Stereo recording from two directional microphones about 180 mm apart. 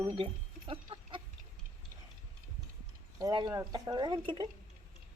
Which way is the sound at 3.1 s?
20° right (ahead or behind).